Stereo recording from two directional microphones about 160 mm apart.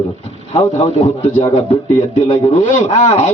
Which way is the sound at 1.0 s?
40° left (ahead or behind).